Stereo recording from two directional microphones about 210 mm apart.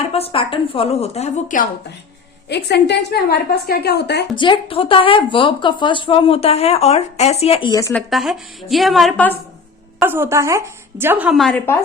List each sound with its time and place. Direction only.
0.1 s speech: 30° left (ahead or behind)
2.5 s a woman's voice: 55° left (ahead or behind)
4.4 s speech: 25° left (ahead or behind)
8.1 s a woman's voice: centre (ahead or behind)
10.0 s a woman's voice: 10° right (ahead or behind); by 11.8 s 10° left (ahead or behind)